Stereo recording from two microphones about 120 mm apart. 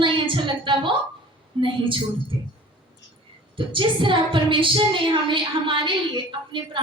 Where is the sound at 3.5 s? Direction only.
45° right (ahead or behind).